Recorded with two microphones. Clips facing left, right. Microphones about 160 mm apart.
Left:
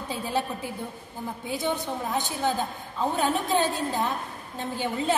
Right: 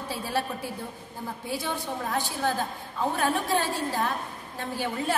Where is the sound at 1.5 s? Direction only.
20° left (ahead or behind).